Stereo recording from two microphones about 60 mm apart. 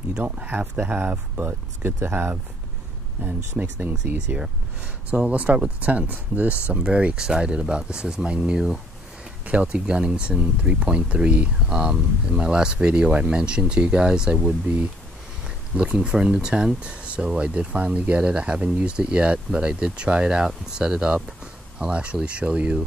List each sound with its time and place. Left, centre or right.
0.2 s speech: right
3.2 s speech: right